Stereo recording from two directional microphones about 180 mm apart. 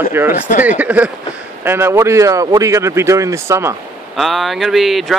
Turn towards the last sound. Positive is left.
turn(degrees=0)  # may be behind; listen again after turning